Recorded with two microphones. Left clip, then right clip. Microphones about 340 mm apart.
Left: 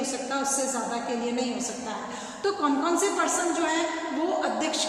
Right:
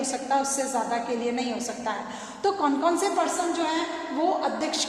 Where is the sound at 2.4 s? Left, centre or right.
Centre.